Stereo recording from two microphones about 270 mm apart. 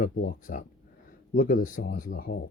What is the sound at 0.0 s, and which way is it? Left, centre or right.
Speech, left.